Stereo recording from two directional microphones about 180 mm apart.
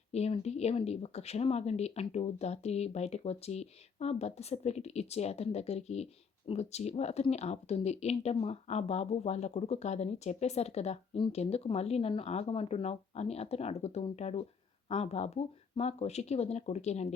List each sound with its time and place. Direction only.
0.1 s speech: 35° left (ahead or behind)